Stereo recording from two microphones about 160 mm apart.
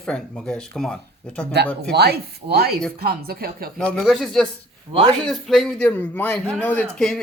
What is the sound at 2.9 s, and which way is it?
Speech, 70° right (ahead or behind).